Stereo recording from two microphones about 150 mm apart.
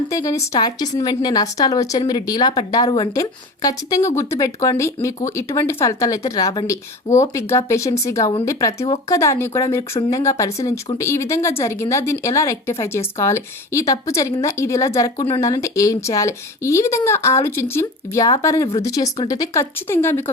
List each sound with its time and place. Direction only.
0.1 s a woman's voice: 20° left (ahead or behind)